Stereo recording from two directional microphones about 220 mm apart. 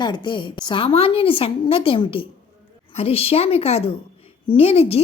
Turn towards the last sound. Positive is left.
turn(degrees=25)  # may be behind; listen again after turning